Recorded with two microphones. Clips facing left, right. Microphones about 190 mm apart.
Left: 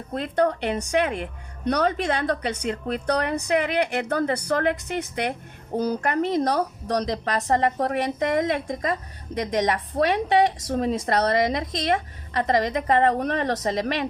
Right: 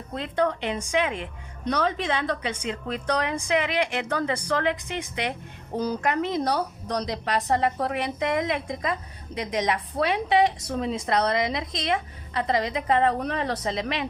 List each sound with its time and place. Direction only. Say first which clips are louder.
0.1 s a woman's voice: left 3 dB; 45° left (ahead or behind)